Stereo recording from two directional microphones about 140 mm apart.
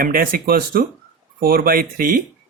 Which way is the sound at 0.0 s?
90° right.